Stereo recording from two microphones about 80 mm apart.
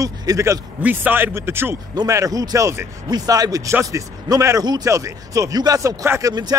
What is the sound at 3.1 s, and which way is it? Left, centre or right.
Speech, right.